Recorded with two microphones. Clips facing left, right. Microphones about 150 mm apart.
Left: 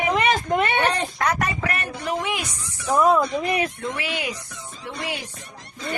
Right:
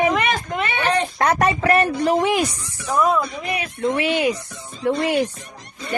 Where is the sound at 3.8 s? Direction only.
25° right (ahead or behind).